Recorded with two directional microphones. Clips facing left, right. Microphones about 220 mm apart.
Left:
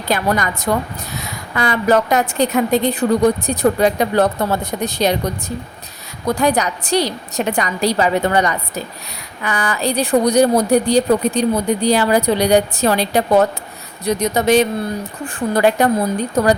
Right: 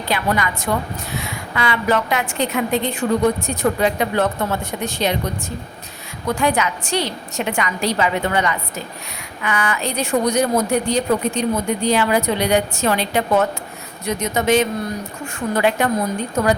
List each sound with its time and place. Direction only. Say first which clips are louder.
0.1 s a woman's voice: left 3 dB; 40° left (ahead or behind)
6.2 s a woman's voice: left 3 dB; 40° left (ahead or behind)